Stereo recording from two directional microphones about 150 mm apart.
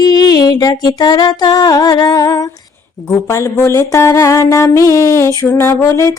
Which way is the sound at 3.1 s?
20° left (ahead or behind).